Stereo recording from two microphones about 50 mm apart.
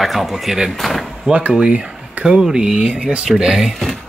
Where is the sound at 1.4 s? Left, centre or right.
Right.